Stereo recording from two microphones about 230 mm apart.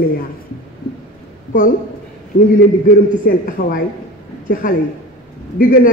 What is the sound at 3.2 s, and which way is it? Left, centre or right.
A man's voice, left.